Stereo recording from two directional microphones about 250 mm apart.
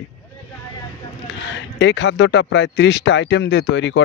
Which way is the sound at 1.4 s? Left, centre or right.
Left.